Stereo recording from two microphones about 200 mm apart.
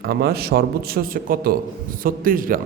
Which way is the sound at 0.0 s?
50° right (ahead or behind).